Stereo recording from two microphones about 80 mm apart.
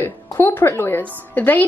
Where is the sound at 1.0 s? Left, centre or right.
Centre.